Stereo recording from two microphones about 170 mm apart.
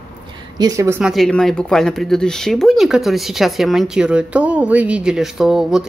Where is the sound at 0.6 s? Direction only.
20° right (ahead or behind).